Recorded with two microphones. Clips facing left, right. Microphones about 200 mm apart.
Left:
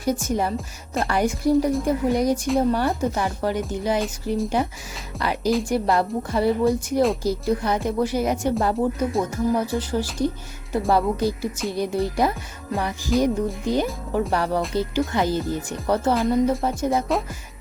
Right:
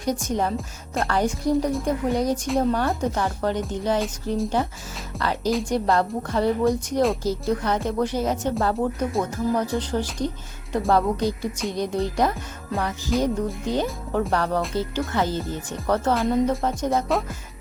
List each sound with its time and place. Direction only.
0.0 s speech: 5° left (ahead or behind)
15.9 s music: 5° left (ahead or behind)